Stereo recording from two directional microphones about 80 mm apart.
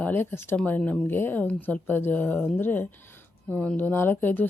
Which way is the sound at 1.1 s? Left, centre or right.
Left.